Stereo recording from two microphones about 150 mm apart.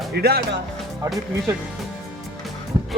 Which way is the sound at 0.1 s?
90° right.